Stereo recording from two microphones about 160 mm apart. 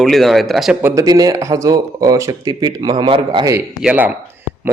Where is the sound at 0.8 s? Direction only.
15° right (ahead or behind).